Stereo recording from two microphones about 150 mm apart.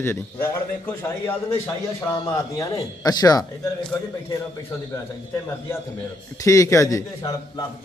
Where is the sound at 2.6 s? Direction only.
25° left (ahead or behind).